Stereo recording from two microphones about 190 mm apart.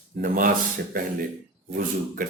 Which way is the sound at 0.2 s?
50° right (ahead or behind).